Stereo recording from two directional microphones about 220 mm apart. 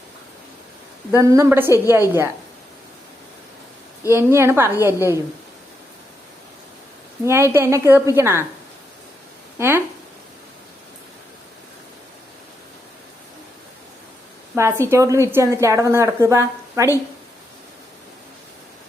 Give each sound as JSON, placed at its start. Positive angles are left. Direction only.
{"t": 1.1, "sound": "a woman's voice", "side_deg": -15}
{"t": 4.1, "sound": "a woman's voice", "side_deg": -10}
{"t": 7.3, "sound": "a woman's voice", "side_deg": -10}
{"t": 9.6, "sound": "speech", "side_deg": -10}
{"t": 14.5, "sound": "a woman's voice", "side_deg": -10}